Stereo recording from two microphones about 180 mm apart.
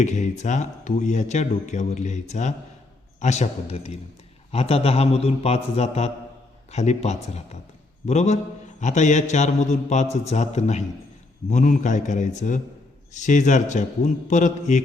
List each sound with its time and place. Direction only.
0.0 s speech: 40° left (ahead or behind)